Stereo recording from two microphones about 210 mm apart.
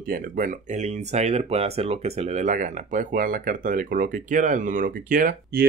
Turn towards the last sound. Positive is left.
turn(degrees=-40)  # may be behind; listen again after turning